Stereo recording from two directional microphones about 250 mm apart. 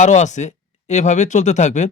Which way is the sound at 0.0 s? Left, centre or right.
Left.